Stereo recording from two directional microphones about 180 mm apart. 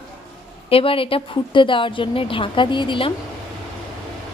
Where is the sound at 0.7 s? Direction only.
30° left (ahead or behind).